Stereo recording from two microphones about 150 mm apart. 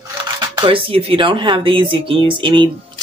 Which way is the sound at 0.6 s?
35° right (ahead or behind).